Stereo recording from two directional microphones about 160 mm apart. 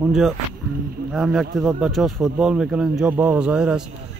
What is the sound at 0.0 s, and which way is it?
Speech, centre (ahead or behind).